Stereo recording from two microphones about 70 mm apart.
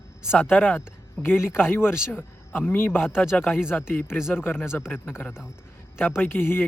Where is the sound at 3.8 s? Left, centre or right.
Left.